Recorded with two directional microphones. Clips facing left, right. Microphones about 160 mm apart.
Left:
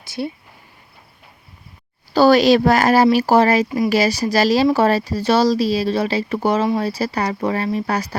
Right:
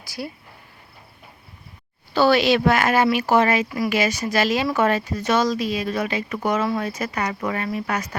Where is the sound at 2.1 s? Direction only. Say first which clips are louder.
Left 5 dB; 40° left (ahead or behind).